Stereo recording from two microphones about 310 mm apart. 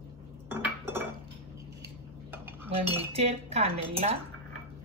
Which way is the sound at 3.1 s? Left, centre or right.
Centre.